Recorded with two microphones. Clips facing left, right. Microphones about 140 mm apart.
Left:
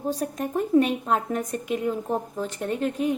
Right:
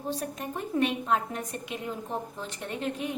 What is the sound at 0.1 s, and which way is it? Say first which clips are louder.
A woman's voice: left 6 dB; 45° left (ahead or behind).